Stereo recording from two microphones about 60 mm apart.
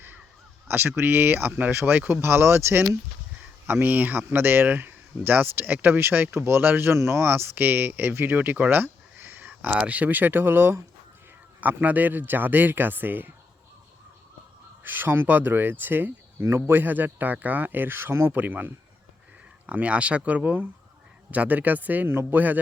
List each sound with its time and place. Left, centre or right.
0.7 s speech: right
3.7 s speech: right
7.3 s speech: right
9.5 s speech: right
11.6 s speech: right
14.8 s speech: right
18.3 s speech: right
22.1 s speech: right